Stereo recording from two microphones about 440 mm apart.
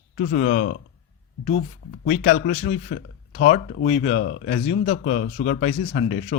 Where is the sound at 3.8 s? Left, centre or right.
Centre.